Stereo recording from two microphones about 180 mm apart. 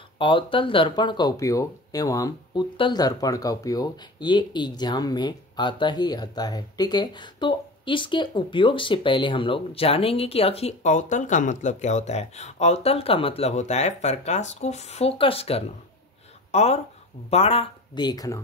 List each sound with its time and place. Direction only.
0.2 s speech: 25° left (ahead or behind)